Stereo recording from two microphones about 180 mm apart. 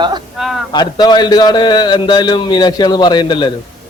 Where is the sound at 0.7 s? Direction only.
25° left (ahead or behind).